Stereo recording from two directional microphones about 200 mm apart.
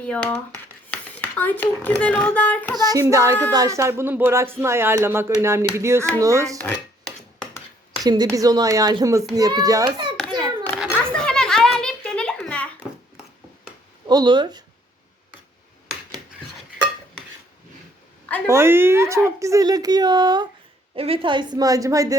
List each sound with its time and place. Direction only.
0.0 s speech: 5° left (ahead or behind)
0.5 s a sound: 10° left (ahead or behind)
2.0 s speech: 5° left (ahead or behind)
2.7 s speech: 20° right (ahead or behind)
6.6 s dishes: 5° left (ahead or behind)
8.0 s speech: 20° right (ahead or behind)
10.7 s a sound: 5° right (ahead or behind)
14.1 s speech: 20° right (ahead or behind)
18.4 s speech: 15° right (ahead or behind)